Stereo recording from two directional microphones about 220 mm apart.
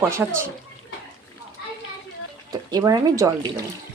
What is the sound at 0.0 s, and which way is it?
Speech, 10° right (ahead or behind).